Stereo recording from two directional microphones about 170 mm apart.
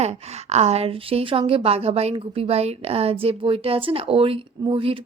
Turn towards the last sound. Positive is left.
turn(degrees=-30)  # may be behind; listen again after turning